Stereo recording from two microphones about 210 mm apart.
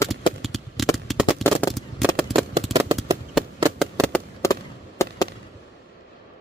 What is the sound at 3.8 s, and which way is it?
Fireworks, 5° left (ahead or behind).